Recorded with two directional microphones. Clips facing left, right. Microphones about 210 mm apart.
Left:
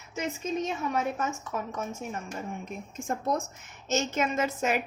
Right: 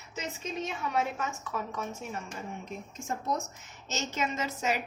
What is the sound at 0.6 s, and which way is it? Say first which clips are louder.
A woman's voice: left 2 dB; 45° left (ahead or behind).